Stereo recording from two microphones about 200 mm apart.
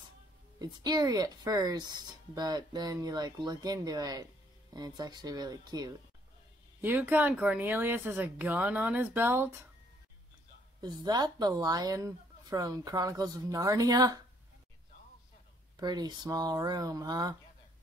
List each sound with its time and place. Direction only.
0.6 s speech: 20° right (ahead or behind)
10.8 s speech: 20° right (ahead or behind)
15.8 s speech: 20° right (ahead or behind)